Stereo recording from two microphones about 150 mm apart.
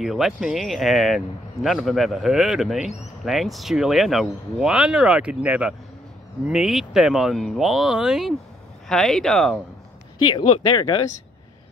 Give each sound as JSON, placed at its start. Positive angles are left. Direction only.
{"t": 0.0, "sound": "speech", "side_deg": 0}
{"t": 10.2, "sound": "speech", "side_deg": 30}